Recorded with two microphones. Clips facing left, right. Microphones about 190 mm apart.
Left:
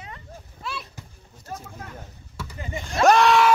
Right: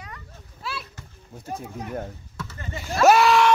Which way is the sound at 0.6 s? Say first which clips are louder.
Even; centre (ahead or behind).